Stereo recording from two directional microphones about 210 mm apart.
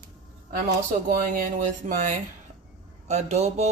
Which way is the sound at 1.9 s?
40° right (ahead or behind).